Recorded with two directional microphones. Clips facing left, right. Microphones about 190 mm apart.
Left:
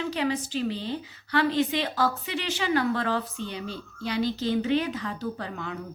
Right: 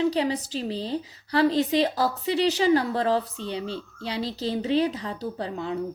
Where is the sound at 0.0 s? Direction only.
35° right (ahead or behind).